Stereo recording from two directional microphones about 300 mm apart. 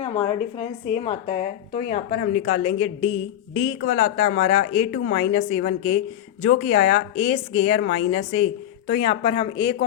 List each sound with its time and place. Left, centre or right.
0.0 s speech: centre
3.6 s a woman's voice: left
8.9 s speech: centre